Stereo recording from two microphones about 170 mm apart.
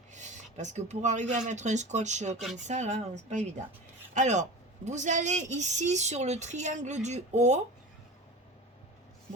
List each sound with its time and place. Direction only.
0.1 s speech: 45° right (ahead or behind)